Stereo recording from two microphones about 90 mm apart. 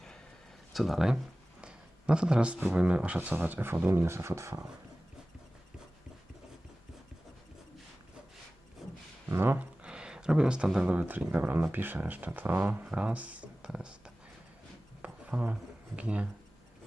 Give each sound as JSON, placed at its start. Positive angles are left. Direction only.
{"t": 0.7, "sound": "speech", "side_deg": 0}
{"t": 1.6, "sound": "a sound", "side_deg": -10}
{"t": 2.7, "sound": "speech", "side_deg": -10}
{"t": 8.8, "sound": "a sound", "side_deg": -5}
{"t": 9.3, "sound": "speech", "side_deg": -25}
{"t": 9.8, "sound": "speech", "side_deg": -10}
{"t": 12.8, "sound": "speech", "side_deg": -15}
{"t": 15.0, "sound": "a sound", "side_deg": -15}
{"t": 16.0, "sound": "speech", "side_deg": -15}